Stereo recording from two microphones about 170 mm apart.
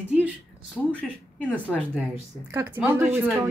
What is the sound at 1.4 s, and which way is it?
Speech, 5° left (ahead or behind).